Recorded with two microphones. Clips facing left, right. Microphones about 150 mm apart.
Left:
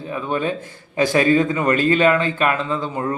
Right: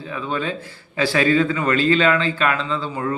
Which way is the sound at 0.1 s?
20° left (ahead or behind).